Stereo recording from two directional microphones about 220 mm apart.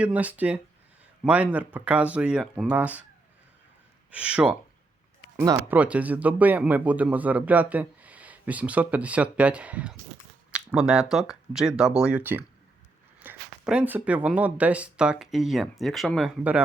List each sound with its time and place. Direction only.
0.0 s speech: 5° right (ahead or behind)
4.1 s speech: 5° right (ahead or behind)